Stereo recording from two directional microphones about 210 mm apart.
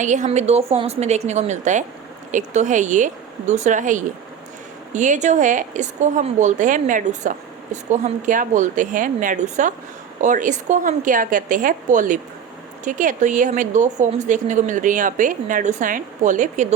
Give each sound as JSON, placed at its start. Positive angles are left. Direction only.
{"t": 0.0, "sound": "a woman's voice", "side_deg": -35}